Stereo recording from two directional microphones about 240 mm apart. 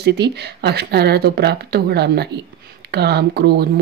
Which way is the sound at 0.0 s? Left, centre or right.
Right.